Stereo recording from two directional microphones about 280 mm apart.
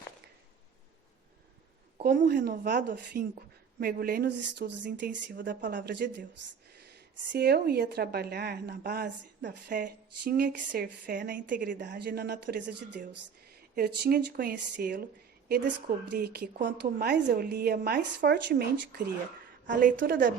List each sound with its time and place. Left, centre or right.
2.0 s a woman's voice: right
7.3 s a woman's voice: right